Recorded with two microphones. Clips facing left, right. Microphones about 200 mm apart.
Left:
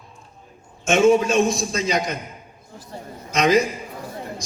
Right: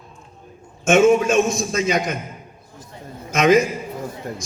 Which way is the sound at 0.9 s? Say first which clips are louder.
Right 2 dB; 35° left (ahead or behind).